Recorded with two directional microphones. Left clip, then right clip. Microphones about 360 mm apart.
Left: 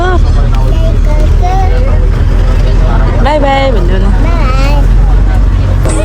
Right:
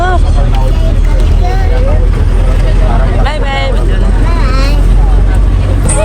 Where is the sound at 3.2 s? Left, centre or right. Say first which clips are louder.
Left 10 dB; centre.